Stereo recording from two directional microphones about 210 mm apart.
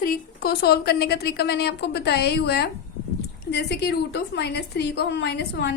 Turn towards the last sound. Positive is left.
turn(degrees=55)  # may be behind; listen again after turning